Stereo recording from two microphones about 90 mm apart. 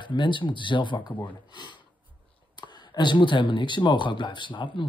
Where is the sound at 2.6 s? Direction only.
60° left (ahead or behind).